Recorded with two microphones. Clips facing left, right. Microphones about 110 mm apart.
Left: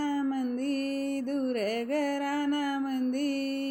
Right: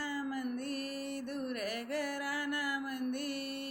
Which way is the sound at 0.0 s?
45° left (ahead or behind).